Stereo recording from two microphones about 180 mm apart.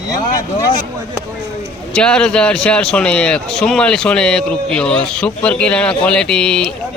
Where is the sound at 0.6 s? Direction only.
20° left (ahead or behind).